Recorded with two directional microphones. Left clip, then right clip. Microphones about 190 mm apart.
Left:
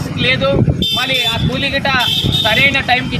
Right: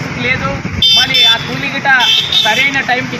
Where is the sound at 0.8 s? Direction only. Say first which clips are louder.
Right 11 dB; 60° left (ahead or behind).